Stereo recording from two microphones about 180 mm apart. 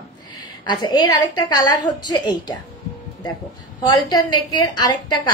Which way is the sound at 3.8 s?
20° left (ahead or behind).